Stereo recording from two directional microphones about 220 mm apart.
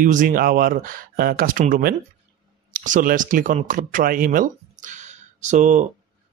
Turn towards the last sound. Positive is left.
turn(degrees=-35)  # may be behind; listen again after turning